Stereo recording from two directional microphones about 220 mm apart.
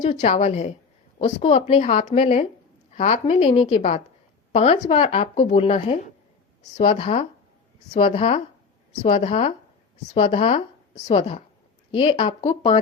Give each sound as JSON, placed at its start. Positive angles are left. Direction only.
{"t": 0.0, "sound": "a woman's voice", "side_deg": 30}